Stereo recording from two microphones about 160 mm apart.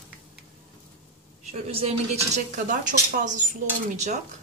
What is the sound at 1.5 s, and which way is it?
Speech, 40° right (ahead or behind).